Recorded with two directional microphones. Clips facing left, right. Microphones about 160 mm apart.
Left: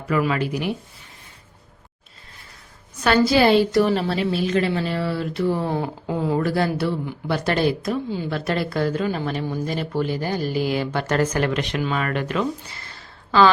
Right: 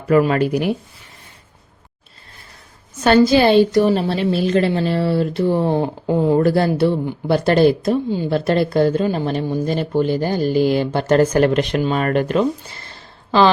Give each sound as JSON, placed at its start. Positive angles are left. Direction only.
{"t": 0.1, "sound": "speech", "side_deg": -45}
{"t": 3.0, "sound": "a woman's voice", "side_deg": -25}